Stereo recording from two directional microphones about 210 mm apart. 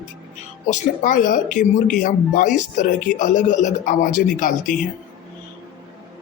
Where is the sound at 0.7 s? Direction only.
35° left (ahead or behind).